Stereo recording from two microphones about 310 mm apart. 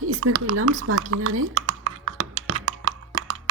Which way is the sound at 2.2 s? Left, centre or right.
Right.